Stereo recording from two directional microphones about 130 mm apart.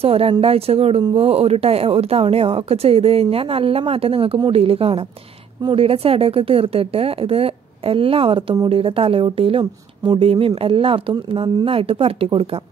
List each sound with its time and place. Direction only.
0.0 s speech: 50° right (ahead or behind)